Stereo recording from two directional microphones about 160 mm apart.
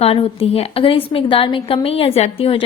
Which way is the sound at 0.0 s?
40° left (ahead or behind).